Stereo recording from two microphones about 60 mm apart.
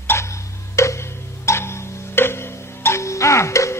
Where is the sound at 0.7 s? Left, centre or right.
Left.